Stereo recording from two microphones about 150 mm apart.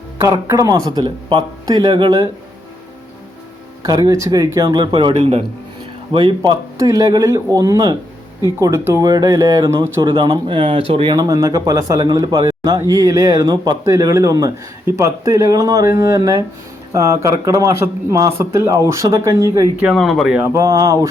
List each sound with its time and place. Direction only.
0.2 s speech: 20° right (ahead or behind)
3.8 s speech: 25° right (ahead or behind)
10.1 s speech: 30° right (ahead or behind)
19.8 s speech: 5° right (ahead or behind)
20.4 s speech: 20° right (ahead or behind)